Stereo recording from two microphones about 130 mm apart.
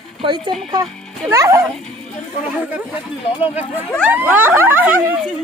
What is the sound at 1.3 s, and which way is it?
Speech, 25° right (ahead or behind).